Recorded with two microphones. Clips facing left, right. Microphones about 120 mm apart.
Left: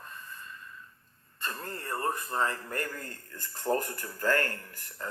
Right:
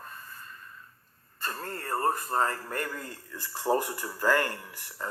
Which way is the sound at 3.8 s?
85° right.